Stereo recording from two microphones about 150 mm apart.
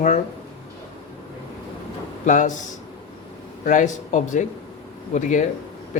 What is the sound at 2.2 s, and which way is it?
Speech, 55° left (ahead or behind).